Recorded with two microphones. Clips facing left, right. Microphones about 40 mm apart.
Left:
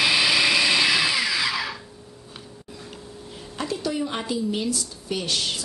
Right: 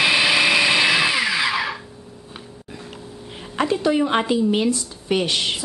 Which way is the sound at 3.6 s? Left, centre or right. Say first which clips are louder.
Right 8 dB; right.